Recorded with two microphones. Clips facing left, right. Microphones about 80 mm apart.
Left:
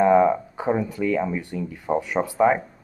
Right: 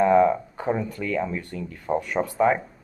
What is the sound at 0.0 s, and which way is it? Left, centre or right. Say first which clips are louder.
Speech: left 1 dB; centre.